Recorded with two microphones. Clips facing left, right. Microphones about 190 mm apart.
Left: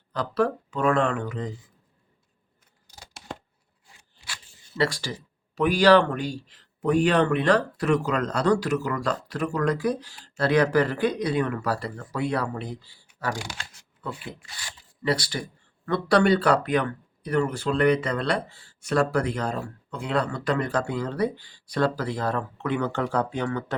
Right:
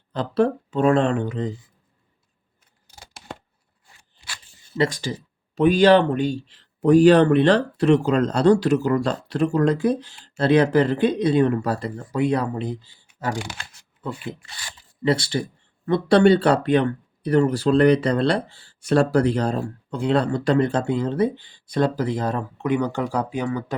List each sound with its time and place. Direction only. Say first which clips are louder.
0.1 s speech: right 4 dB; 25° right (ahead or behind)
4.8 s speech: right 3 dB; 20° right (ahead or behind)
15.0 s speech: right 5 dB; 25° right (ahead or behind); by 23.7 s 10° right (ahead or behind)